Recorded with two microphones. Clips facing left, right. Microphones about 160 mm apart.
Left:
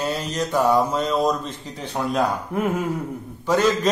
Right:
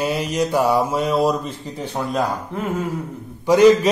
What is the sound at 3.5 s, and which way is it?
Speech, 15° right (ahead or behind).